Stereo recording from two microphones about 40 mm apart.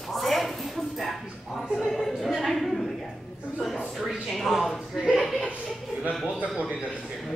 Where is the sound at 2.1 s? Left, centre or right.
Centre.